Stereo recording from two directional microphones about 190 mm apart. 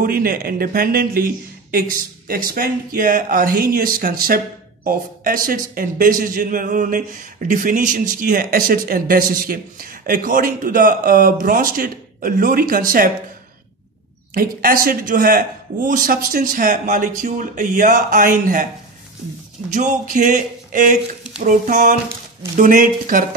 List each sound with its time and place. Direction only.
0.0 s a man's voice: 50° right (ahead or behind)
14.3 s a man's voice: 50° right (ahead or behind)
19.7 s a man's voice: 40° right (ahead or behind)